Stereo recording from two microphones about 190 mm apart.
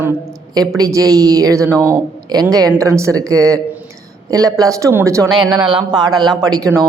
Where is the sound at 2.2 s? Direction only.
20° right (ahead or behind).